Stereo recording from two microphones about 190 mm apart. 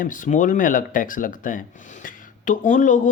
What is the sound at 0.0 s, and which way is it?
Speech, 45° left (ahead or behind).